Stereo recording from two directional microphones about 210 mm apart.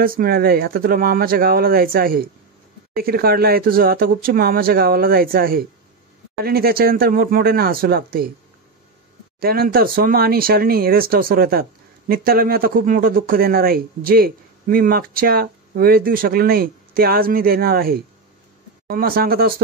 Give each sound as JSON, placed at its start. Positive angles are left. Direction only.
{"t": 0.0, "sound": "speech", "side_deg": -45}
{"t": 9.4, "sound": "speech", "side_deg": -45}